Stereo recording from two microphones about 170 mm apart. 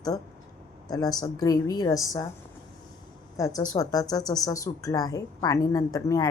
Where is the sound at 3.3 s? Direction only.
20° left (ahead or behind).